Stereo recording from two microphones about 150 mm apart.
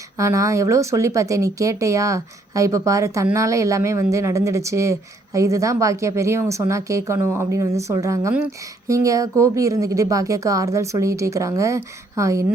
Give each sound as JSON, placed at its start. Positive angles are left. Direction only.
{"t": 0.2, "sound": "speech", "side_deg": -20}